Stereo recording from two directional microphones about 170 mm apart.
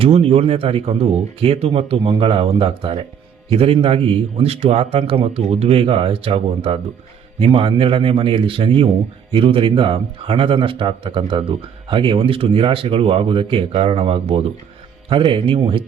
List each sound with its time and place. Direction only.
0.0 s a man's voice: 35° right (ahead or behind)